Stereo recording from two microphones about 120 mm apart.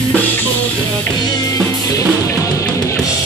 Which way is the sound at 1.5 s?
30° left (ahead or behind).